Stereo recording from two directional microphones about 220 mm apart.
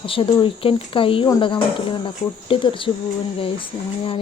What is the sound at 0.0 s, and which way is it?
Speech, 25° left (ahead or behind).